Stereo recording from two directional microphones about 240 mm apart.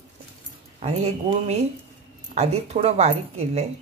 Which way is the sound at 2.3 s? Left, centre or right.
Right.